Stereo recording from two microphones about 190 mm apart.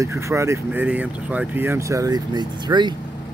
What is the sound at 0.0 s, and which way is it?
Speech, 15° right (ahead or behind).